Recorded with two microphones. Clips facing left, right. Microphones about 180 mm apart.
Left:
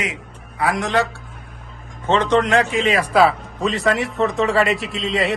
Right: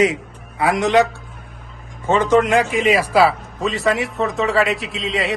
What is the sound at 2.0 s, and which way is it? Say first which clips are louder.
A man's voice: right 2 dB; 10° right (ahead or behind).